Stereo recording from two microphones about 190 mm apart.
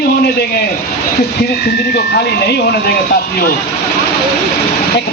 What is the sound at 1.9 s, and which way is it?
Speech, 60° left (ahead or behind).